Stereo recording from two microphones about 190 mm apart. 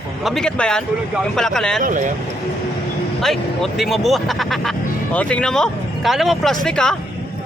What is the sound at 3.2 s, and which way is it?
Speech, centre (ahead or behind).